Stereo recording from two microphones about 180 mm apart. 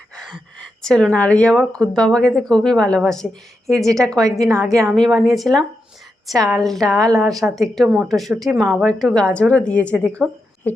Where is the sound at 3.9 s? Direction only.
Centre (ahead or behind).